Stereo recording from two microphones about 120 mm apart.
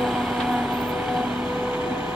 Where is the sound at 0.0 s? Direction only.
5° right (ahead or behind).